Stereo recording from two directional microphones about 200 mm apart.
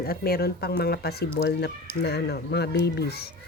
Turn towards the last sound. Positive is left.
turn(degrees=55)  # may be behind; listen again after turning